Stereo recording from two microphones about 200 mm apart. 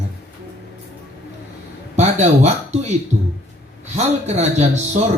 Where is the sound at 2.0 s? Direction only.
35° right (ahead or behind).